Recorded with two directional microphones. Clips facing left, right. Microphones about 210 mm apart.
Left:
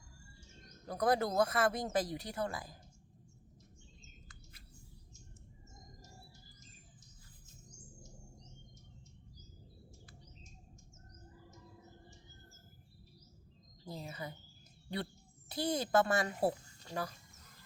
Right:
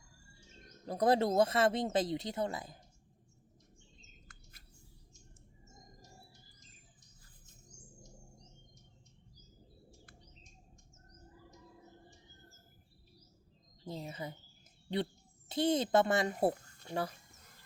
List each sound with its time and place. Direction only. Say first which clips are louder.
0.9 s speech: right 3 dB; 25° right (ahead or behind)
13.8 s a sound: right 2 dB; 20° right (ahead or behind)
15.4 s speech: right 5 dB; 20° right (ahead or behind)